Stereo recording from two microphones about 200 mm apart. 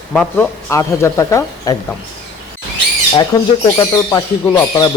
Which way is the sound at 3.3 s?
20° left (ahead or behind).